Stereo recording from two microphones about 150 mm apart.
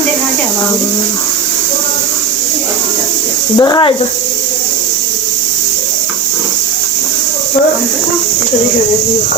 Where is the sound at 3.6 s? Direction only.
30° left (ahead or behind).